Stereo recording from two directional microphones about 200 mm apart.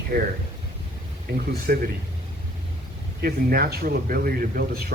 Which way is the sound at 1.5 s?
50° right (ahead or behind).